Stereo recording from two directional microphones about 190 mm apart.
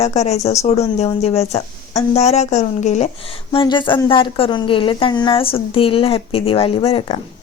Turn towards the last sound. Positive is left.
turn(degrees=30)  # may be behind; listen again after turning